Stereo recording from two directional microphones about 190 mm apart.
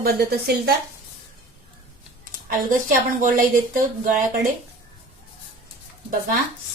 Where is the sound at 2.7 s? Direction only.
45° right (ahead or behind).